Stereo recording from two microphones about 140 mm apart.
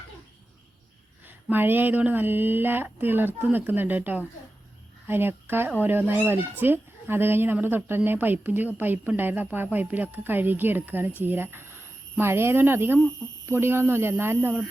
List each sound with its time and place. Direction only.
1.2 s speech: 15° right (ahead or behind)